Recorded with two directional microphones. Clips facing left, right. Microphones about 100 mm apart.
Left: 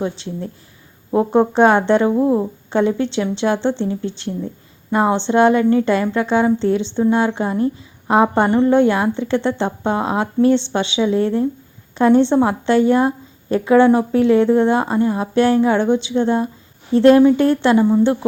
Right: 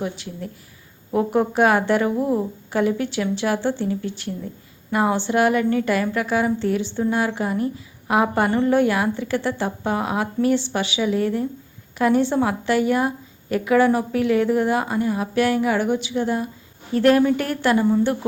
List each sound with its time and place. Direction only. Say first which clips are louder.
0.0 s a woman's voice: left 5 dB; 30° left (ahead or behind)